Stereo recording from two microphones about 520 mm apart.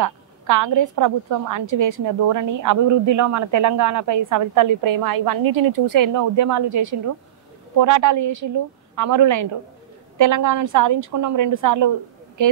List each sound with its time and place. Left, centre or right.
0.0 s a woman's voice: right